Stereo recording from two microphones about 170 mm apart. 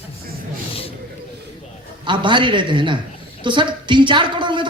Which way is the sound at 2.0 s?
30° right (ahead or behind).